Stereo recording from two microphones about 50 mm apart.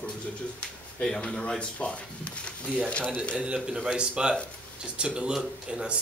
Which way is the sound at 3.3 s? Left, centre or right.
Centre.